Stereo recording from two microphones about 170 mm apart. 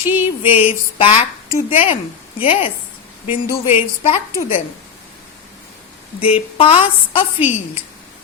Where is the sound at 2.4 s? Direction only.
35° left (ahead or behind).